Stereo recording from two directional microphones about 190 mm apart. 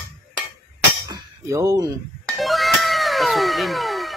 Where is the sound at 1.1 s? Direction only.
15° right (ahead or behind).